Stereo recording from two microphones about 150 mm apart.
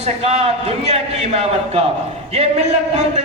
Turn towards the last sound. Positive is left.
turn(degrees=-45)  # may be behind; listen again after turning